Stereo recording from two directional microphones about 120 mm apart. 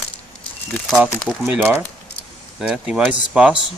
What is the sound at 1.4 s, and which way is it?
Speech, 15° right (ahead or behind).